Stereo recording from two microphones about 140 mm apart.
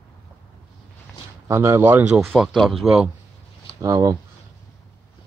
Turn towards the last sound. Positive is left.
turn(degrees=-25)  # may be behind; listen again after turning